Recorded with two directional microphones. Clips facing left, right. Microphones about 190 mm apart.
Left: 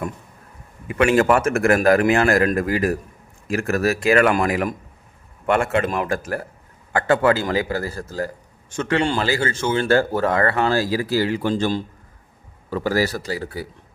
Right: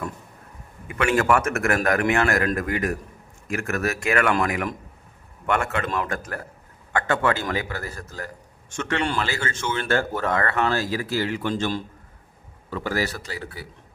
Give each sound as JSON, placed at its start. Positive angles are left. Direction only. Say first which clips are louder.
{"t": 0.9, "sound": "a man's voice", "louder": "left 4 dB", "side_deg": 25}